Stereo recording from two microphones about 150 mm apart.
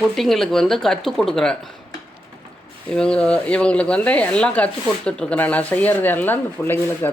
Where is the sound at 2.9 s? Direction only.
5° left (ahead or behind).